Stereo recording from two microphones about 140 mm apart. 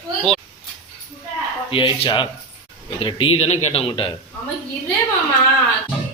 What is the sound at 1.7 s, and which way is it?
Speech, 40° left (ahead or behind).